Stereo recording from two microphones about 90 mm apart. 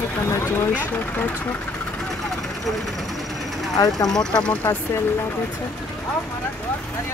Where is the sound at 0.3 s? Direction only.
30° left (ahead or behind).